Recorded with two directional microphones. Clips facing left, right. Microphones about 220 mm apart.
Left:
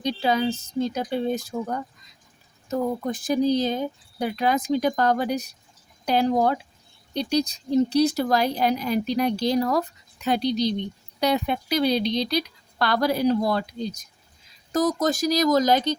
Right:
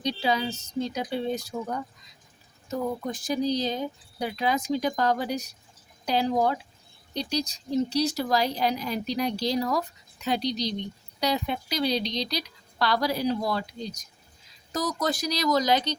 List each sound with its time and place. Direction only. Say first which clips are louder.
0.0 s speech: left 4 dB; 50° left (ahead or behind)
2.6 s speech: left 4 dB; 55° left (ahead or behind)